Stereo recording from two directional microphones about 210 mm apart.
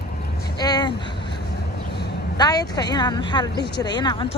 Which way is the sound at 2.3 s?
20° left (ahead or behind).